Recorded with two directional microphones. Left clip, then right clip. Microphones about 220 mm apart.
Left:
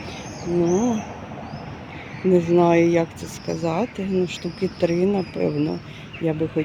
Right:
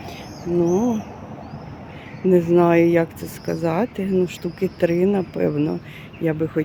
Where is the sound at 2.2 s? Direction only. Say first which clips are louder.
Right 1 dB; 10° right (ahead or behind).